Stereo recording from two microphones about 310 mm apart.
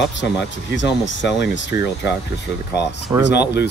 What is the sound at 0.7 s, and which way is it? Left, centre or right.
Speech, left.